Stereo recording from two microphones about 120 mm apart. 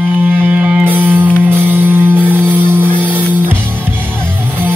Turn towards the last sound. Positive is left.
turn(degrees=-15)  # may be behind; listen again after turning